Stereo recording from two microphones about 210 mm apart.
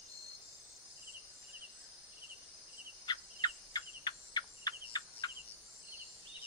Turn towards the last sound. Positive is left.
turn(degrees=20)  # may be behind; listen again after turning